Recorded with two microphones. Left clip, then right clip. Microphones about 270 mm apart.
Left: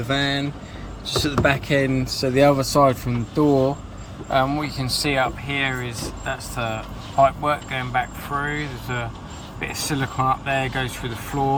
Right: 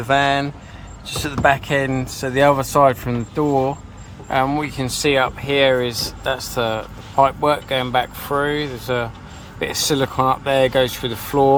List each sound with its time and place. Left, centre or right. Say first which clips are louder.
0.1 s speech: right 7 dB; right
2.4 s speech: right 3 dB; centre; by 11.4 s right